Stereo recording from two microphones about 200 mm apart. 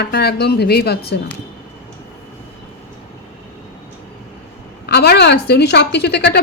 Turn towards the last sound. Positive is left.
turn(degrees=55)  # may be behind; listen again after turning